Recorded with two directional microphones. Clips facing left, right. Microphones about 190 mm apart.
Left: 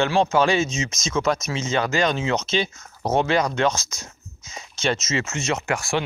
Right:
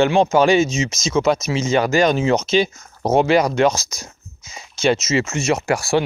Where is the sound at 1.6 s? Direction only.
35° right (ahead or behind).